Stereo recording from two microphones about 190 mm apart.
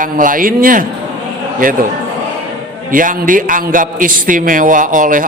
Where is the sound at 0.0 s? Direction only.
45° right (ahead or behind).